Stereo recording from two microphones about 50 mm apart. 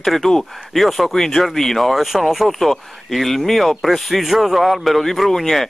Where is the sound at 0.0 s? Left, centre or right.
Centre.